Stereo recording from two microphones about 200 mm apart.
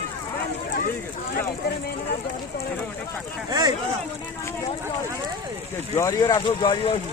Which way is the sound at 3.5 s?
20° right (ahead or behind).